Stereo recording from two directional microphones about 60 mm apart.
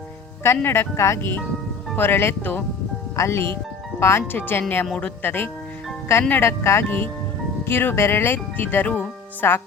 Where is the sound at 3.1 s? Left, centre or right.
Left.